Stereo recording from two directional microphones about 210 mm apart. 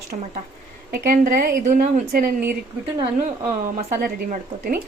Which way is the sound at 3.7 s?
40° right (ahead or behind).